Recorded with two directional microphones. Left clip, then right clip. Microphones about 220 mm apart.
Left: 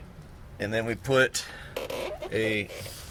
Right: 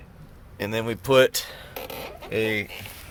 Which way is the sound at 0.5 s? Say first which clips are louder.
Right 1 dB; 35° right (ahead or behind).